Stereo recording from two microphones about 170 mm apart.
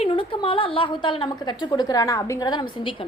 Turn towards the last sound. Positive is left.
turn(degrees=30)  # may be behind; listen again after turning